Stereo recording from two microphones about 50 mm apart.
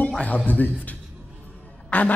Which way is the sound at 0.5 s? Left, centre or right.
Left.